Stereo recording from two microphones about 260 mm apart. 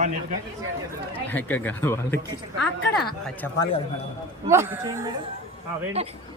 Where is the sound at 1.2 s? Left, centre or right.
Centre.